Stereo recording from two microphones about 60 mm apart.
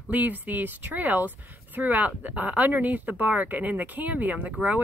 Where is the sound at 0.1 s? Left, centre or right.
Right.